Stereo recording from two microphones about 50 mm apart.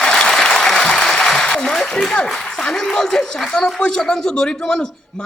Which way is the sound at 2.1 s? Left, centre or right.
Centre.